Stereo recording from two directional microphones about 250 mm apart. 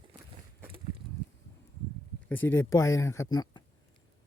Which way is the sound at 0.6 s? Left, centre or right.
Right.